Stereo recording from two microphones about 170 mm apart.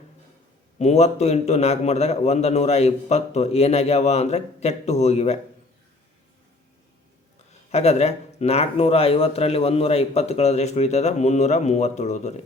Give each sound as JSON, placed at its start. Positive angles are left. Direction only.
{"t": 0.8, "sound": "speech", "side_deg": 40}
{"t": 7.7, "sound": "speech", "side_deg": 40}